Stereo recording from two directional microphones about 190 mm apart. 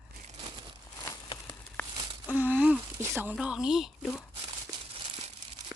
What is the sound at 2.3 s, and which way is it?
Speech, 10° right (ahead or behind).